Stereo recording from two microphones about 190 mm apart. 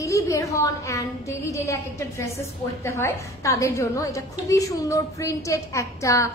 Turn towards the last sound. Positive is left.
turn(degrees=15)  # may be behind; listen again after turning